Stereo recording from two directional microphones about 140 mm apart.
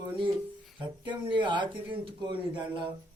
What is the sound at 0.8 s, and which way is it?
Speech, 35° right (ahead or behind).